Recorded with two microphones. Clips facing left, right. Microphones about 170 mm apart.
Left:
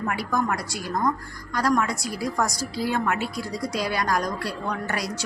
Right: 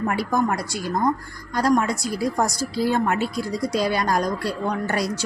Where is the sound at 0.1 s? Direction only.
30° right (ahead or behind).